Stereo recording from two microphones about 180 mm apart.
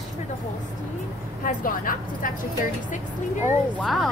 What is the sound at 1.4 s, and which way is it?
Speech, 50° left (ahead or behind).